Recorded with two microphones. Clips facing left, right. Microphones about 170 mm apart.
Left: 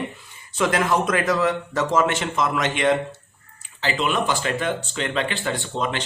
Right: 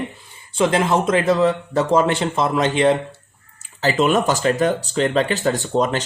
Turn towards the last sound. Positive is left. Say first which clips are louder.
# right 6 dB
turn(degrees=-40)  # may be behind; listen again after turning